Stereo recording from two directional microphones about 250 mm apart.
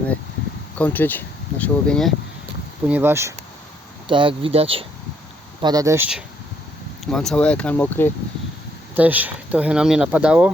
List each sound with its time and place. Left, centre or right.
0.8 s speech: centre
4.1 s speech: centre
9.0 s speech: centre